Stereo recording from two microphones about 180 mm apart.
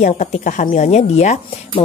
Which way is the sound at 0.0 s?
40° left (ahead or behind).